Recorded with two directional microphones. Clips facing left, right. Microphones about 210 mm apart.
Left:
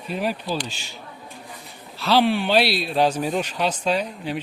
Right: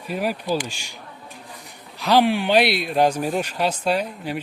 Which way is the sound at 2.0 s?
15° right (ahead or behind).